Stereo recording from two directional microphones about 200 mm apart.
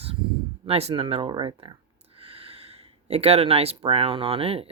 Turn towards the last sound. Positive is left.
turn(degrees=-30)  # may be behind; listen again after turning